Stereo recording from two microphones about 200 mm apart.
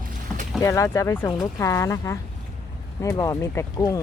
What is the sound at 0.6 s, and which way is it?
Speech, 15° left (ahead or behind).